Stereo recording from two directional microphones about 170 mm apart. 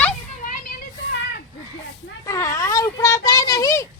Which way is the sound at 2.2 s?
20° left (ahead or behind).